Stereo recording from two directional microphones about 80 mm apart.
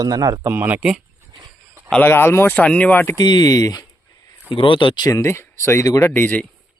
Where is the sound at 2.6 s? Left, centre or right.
Centre.